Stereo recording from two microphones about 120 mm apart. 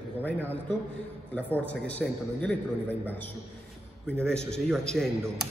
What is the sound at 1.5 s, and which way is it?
A man's voice, 10° left (ahead or behind).